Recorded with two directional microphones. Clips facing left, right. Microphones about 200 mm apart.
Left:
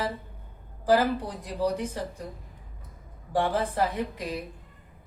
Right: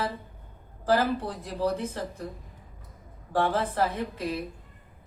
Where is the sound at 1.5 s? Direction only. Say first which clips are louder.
Left 1 dB; 15° left (ahead or behind).